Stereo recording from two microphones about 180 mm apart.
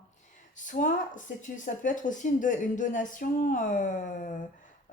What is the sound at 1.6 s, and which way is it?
Speech, 45° left (ahead or behind).